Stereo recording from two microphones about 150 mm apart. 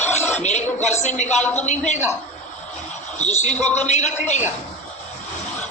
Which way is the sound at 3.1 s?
50° left (ahead or behind).